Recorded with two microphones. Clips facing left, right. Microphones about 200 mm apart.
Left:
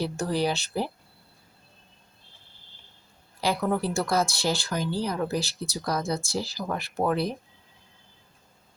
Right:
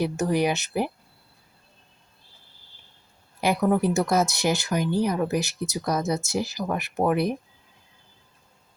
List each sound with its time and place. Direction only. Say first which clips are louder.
0.0 s speech: right 3 dB; 15° right (ahead or behind)
3.4 s speech: right 4 dB; 20° right (ahead or behind)